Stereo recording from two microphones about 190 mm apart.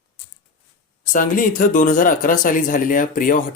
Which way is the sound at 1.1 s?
45° left (ahead or behind).